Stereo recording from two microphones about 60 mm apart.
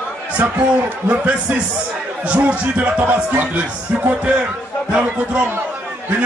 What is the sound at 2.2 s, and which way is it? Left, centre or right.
A man's voice, right.